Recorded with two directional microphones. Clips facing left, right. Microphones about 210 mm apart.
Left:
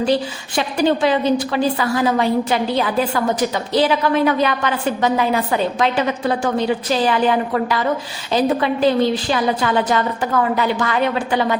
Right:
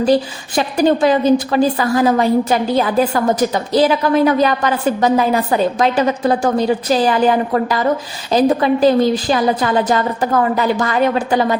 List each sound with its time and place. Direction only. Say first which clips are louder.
0.0 s a woman's voice: right 4 dB; 40° right (ahead or behind)